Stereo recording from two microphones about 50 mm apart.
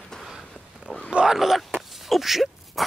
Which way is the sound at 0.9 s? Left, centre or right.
Left.